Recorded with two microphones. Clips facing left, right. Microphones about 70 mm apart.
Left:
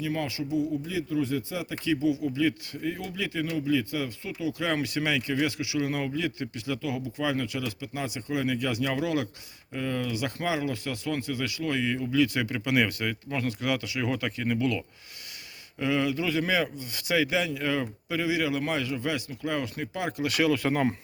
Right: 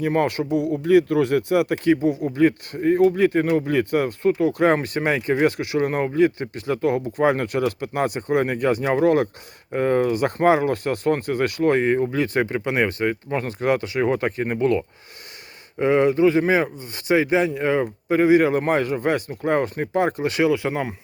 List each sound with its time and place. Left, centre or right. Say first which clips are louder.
0.0 s speech: right 10 dB; right; by 20.9 s centre